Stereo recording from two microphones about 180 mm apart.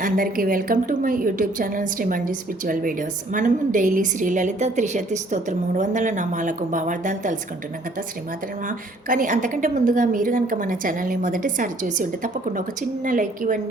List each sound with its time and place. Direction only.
0.0 s a woman's voice: 50° right (ahead or behind)
8.6 s a woman's voice: 45° right (ahead or behind)